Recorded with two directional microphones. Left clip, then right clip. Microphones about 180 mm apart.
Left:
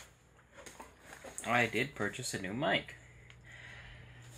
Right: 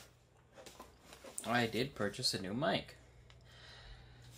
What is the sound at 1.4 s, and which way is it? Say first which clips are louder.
Speech: left 4 dB; 15° right (ahead or behind).